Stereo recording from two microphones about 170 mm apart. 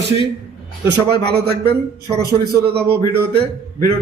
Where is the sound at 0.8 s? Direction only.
70° right (ahead or behind).